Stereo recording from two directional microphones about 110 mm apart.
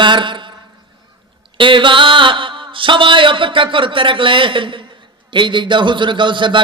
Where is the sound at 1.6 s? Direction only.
50° right (ahead or behind).